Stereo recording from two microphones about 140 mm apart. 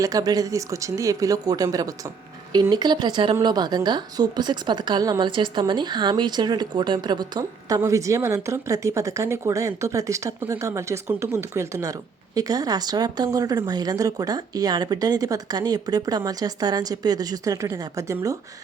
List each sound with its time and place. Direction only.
0.0 s a woman's voice: 25° right (ahead or behind)